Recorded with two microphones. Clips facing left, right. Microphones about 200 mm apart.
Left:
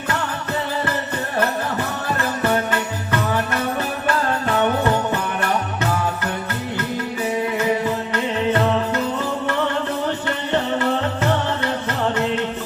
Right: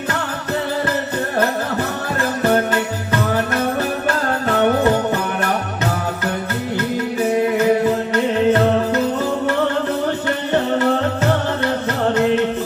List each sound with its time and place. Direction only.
2.0 s music: 45° right (ahead or behind)
8.1 s music: 45° right (ahead or behind)